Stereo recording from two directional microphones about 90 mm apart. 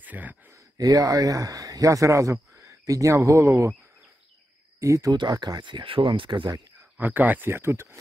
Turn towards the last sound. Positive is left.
turn(degrees=-30)  # may be behind; listen again after turning